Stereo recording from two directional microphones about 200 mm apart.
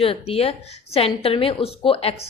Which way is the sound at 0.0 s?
30° left (ahead or behind).